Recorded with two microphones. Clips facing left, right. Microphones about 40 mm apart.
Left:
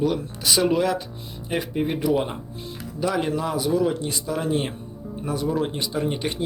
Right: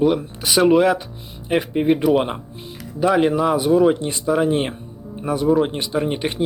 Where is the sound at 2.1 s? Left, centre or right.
Right.